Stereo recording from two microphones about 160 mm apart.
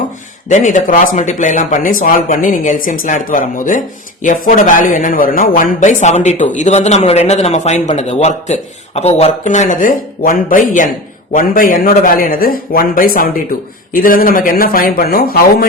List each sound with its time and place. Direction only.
0.4 s a man's voice: 50° left (ahead or behind); by 15.6 s 75° left (ahead or behind)